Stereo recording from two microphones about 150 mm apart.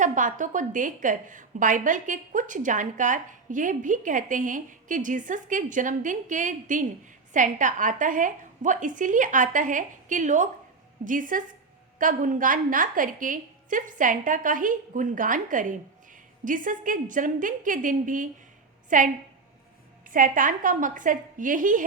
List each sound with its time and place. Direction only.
0.0 s a woman's voice: 60° right (ahead or behind)